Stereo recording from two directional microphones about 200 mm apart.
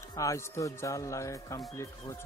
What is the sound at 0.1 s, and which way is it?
A man's voice, 15° left (ahead or behind).